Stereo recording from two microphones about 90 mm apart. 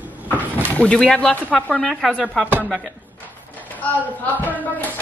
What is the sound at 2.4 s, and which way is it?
Speech, 20° right (ahead or behind).